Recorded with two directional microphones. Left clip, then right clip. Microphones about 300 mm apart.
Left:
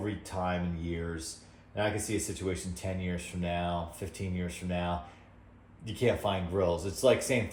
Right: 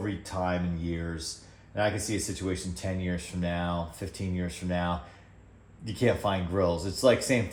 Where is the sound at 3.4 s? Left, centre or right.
Right.